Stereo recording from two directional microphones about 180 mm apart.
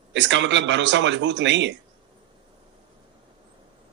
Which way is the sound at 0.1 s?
90° right.